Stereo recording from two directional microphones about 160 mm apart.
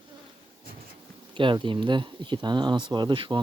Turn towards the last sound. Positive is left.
turn(degrees=-30)  # may be behind; listen again after turning